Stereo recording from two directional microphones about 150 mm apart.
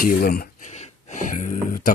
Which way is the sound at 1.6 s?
65° left (ahead or behind).